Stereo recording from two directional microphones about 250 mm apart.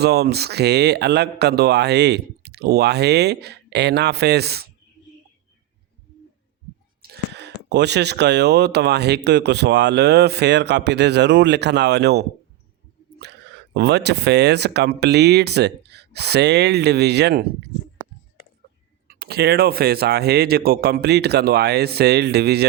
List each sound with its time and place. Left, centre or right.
0.0 s speech: right
7.0 s speech: right
19.0 s speech: right